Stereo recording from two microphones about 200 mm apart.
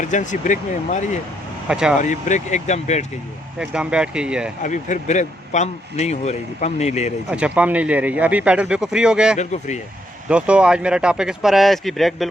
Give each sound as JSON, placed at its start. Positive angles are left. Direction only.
{"t": 0.0, "sound": "speech", "side_deg": 40}
{"t": 1.6, "sound": "speech", "side_deg": -5}
{"t": 2.0, "sound": "speech", "side_deg": 40}
{"t": 3.6, "sound": "speech", "side_deg": -5}
{"t": 4.6, "sound": "speech", "side_deg": 40}
{"t": 7.3, "sound": "speech", "side_deg": -5}
{"t": 9.4, "sound": "speech", "side_deg": 35}
{"t": 10.2, "sound": "speech", "side_deg": -5}